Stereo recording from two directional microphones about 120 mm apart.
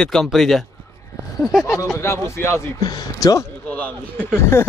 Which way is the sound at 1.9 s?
25° left (ahead or behind).